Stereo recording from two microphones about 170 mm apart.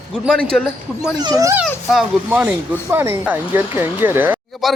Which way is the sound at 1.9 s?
5° right (ahead or behind).